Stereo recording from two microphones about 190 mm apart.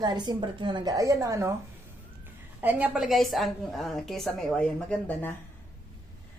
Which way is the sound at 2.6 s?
10° right (ahead or behind).